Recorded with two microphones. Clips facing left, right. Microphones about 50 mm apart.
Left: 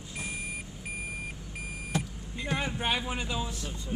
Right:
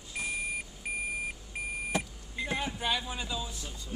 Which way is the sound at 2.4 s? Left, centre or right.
Left.